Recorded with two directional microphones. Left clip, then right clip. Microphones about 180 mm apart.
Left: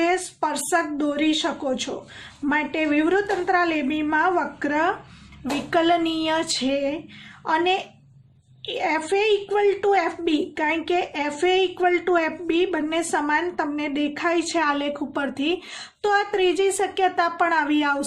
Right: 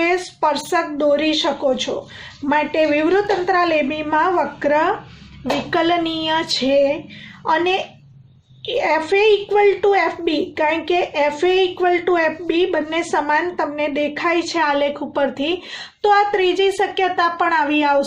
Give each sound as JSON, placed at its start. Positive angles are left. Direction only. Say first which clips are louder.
{"t": 0.0, "sound": "a child's voice", "louder": "right 5 dB", "side_deg": 45}